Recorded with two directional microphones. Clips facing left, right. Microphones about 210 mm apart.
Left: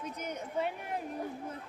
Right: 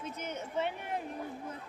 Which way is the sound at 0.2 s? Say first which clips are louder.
Even; 35° left (ahead or behind).